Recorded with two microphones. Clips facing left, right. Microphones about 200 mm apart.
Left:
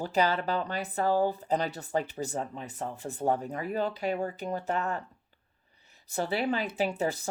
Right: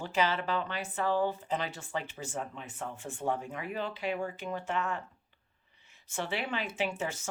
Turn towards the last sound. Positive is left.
turn(degrees=35)  # may be behind; listen again after turning